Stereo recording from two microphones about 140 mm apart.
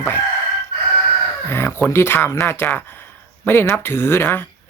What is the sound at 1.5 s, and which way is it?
Speech, 15° left (ahead or behind).